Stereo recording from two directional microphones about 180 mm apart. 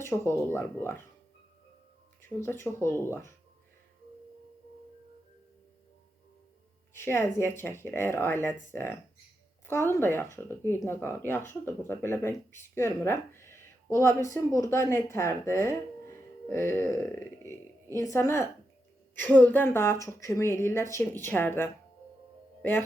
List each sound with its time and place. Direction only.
0.0 s speech: 15° left (ahead or behind)
2.4 s speech: 15° left (ahead or behind)
6.9 s speech: 15° left (ahead or behind)